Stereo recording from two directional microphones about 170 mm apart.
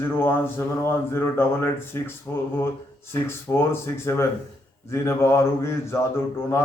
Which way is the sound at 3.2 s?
15° left (ahead or behind).